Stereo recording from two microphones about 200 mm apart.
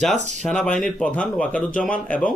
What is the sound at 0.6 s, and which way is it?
Speech, 5° left (ahead or behind).